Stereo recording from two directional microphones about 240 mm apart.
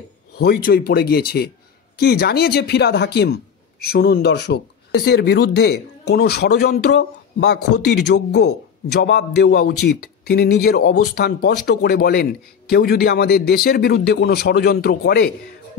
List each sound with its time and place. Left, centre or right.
0.4 s a man's voice: left